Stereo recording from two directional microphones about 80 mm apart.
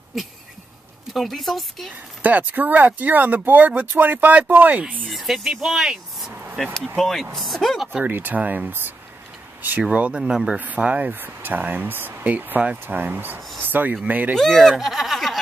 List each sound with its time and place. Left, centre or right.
1.1 s speech: centre
2.2 s speech: right
5.1 s speech: centre
7.9 s speech: right
13.6 s a sound: right
14.0 s speech: right
14.3 s speech: centre